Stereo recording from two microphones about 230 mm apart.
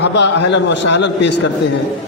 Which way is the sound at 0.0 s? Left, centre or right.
Left.